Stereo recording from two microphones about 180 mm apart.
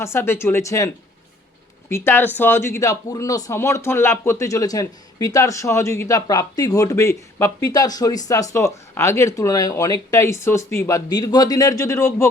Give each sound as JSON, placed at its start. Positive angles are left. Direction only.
{"t": 0.0, "sound": "speech", "side_deg": 15}
{"t": 1.9, "sound": "speech", "side_deg": 15}